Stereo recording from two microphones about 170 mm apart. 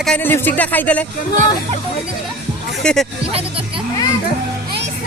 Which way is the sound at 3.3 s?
35° right (ahead or behind).